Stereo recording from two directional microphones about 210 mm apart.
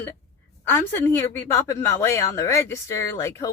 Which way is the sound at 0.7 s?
10° left (ahead or behind).